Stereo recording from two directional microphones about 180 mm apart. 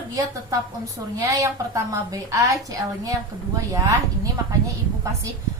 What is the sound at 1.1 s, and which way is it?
A woman's voice, 15° right (ahead or behind).